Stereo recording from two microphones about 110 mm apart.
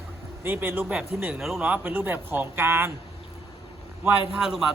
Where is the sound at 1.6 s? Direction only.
15° right (ahead or behind).